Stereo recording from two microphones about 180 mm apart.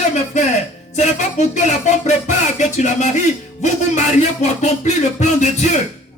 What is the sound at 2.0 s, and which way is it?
Music, 40° left (ahead or behind).